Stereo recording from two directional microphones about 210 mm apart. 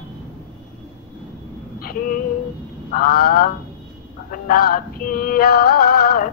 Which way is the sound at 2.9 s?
45° left (ahead or behind).